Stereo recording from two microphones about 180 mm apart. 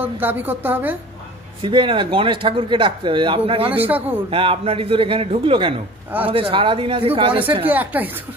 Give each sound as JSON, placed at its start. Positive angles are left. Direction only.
{"t": 0.0, "sound": "a woman's voice", "side_deg": -10}
{"t": 1.6, "sound": "speech", "side_deg": -30}
{"t": 3.7, "sound": "a woman's voice", "side_deg": -10}
{"t": 4.3, "sound": "a man's voice", "side_deg": -30}
{"t": 7.6, "sound": "a woman's voice", "side_deg": -10}